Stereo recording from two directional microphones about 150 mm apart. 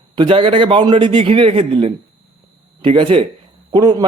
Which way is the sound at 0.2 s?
35° right (ahead or behind).